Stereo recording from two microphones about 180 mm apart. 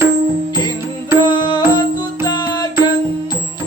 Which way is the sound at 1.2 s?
25° left (ahead or behind).